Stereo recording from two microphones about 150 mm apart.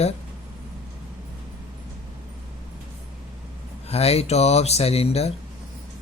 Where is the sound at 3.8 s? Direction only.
45° left (ahead or behind).